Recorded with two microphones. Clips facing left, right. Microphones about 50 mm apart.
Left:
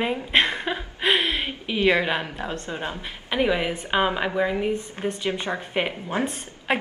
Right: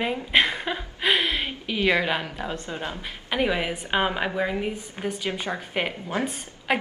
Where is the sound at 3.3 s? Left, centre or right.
Centre.